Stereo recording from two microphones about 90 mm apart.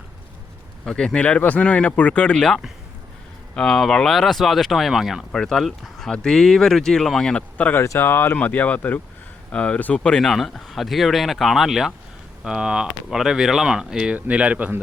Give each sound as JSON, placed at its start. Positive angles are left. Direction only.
{"t": 0.9, "sound": "speech", "side_deg": 10}
{"t": 7.9, "sound": "speech", "side_deg": 25}